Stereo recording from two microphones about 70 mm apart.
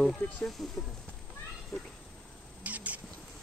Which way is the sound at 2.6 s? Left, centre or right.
Right.